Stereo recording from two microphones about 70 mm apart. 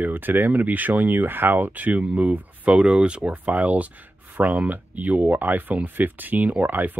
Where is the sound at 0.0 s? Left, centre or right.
Right.